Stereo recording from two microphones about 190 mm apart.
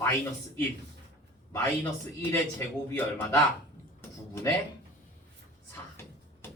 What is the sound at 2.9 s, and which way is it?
Speech, 10° left (ahead or behind).